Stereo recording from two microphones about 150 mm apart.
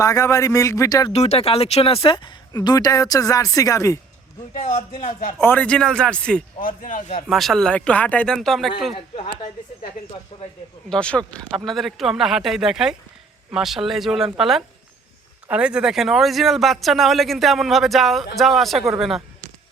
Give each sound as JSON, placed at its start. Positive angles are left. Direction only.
{"t": 0.0, "sound": "a woman's voice", "side_deg": 20}
{"t": 1.1, "sound": "a woman's voice", "side_deg": 45}
{"t": 4.5, "sound": "speech", "side_deg": 55}
{"t": 5.4, "sound": "speech", "side_deg": 10}
{"t": 6.8, "sound": "speech", "side_deg": 50}
{"t": 7.3, "sound": "speech", "side_deg": 0}
{"t": 10.8, "sound": "speech", "side_deg": 5}